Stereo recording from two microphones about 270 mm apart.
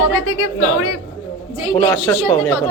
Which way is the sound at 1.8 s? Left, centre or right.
Centre.